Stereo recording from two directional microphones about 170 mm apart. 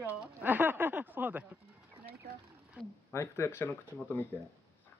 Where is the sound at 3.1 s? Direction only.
15° left (ahead or behind).